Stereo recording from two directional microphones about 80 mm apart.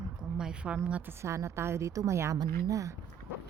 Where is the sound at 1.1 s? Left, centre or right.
Right.